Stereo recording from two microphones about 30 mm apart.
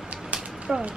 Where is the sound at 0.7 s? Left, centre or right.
Right.